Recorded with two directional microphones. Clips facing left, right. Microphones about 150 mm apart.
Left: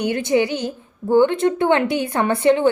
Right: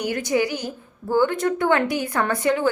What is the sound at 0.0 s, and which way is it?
A woman's voice, 25° left (ahead or behind).